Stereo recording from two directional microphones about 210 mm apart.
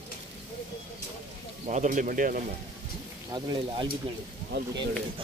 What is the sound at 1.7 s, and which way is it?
Speech, 35° right (ahead or behind).